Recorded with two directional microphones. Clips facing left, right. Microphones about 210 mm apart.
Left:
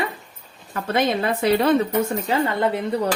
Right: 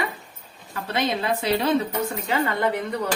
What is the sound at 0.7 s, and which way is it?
A woman's voice, 50° left (ahead or behind).